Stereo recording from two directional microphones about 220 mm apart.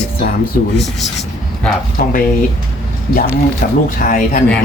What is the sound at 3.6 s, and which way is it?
Speech, 35° left (ahead or behind).